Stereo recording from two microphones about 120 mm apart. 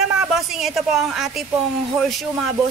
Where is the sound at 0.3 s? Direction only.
5° right (ahead or behind).